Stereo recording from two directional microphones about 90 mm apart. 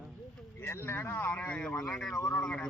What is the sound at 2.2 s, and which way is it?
Speech, 40° left (ahead or behind).